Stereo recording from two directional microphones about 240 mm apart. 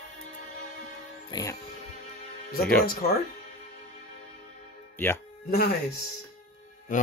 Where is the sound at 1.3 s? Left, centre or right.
Centre.